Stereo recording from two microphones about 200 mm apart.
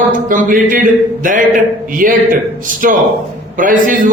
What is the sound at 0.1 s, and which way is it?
Speech, 45° right (ahead or behind).